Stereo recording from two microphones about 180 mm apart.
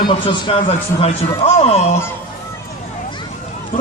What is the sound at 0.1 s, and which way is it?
A man's voice, 25° left (ahead or behind).